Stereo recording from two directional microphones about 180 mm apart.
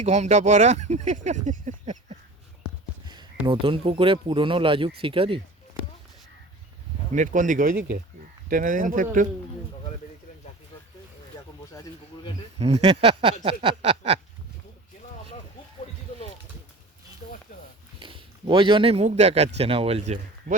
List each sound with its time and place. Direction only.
0.0 s speech: 40° right (ahead or behind)
3.4 s speech: 30° right (ahead or behind)
7.1 s speech: 45° right (ahead or behind)
11.7 s a sound: 20° left (ahead or behind)
12.5 s speech: 35° right (ahead or behind)
17.2 s a sound: 50° left (ahead or behind)
18.0 s speech: 25° right (ahead or behind)